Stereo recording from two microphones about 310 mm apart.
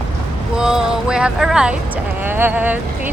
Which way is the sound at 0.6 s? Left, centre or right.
Centre.